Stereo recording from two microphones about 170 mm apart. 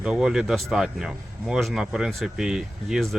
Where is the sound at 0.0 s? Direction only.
5° right (ahead or behind).